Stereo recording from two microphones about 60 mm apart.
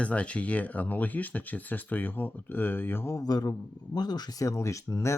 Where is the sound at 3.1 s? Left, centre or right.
Left.